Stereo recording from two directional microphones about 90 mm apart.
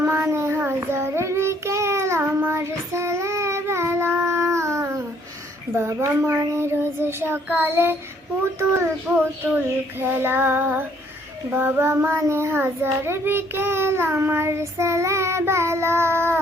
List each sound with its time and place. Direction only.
0.0 s child singing: 25° right (ahead or behind)
8.5 s a child's voice: 30° right (ahead or behind)
9.4 s child singing: 25° right (ahead or behind)